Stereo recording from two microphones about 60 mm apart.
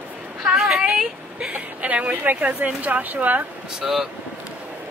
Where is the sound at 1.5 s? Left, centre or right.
Right.